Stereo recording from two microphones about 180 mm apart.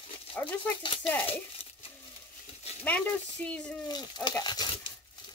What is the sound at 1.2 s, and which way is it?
Speech, 30° left (ahead or behind).